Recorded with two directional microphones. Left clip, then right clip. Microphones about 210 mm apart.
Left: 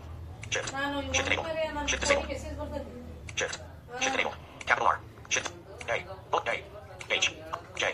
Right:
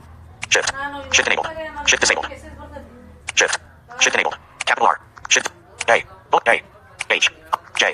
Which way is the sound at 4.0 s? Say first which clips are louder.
Right 12 dB; 45° right (ahead or behind).